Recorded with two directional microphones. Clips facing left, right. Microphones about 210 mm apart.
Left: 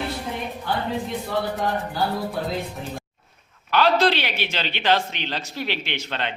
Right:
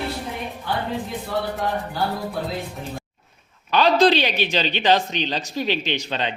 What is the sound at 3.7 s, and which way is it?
A man's voice, 15° right (ahead or behind).